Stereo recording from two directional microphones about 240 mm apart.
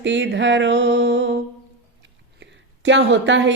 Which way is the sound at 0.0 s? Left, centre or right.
Right.